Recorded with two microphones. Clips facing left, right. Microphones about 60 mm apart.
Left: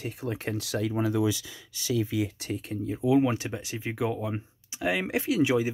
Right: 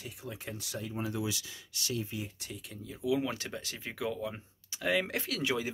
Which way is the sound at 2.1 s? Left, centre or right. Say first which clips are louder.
Left 11 dB; left.